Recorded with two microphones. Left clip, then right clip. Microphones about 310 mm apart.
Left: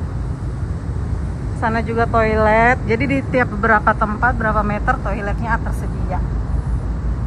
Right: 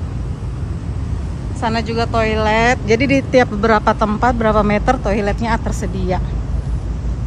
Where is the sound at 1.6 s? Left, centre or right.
Centre.